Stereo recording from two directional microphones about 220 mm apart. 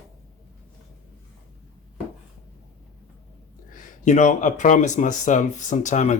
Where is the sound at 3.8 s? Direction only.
35° left (ahead or behind).